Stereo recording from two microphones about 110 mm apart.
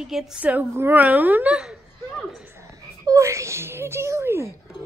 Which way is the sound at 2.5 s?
30° right (ahead or behind).